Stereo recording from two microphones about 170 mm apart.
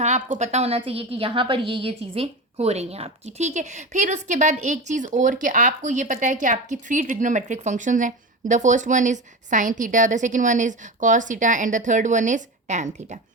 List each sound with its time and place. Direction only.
0.0 s a woman's voice: 45° right (ahead or behind)